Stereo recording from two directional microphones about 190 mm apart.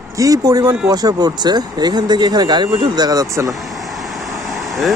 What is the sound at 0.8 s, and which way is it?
Speech, 20° right (ahead or behind).